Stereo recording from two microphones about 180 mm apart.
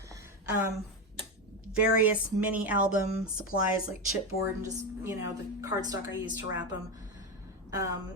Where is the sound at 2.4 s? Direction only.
10° right (ahead or behind).